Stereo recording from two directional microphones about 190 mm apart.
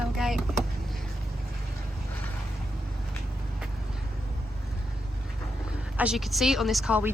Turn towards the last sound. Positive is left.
turn(degrees=-5)  # may be behind; listen again after turning